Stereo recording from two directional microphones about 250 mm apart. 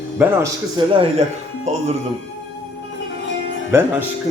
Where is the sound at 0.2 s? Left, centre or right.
Centre.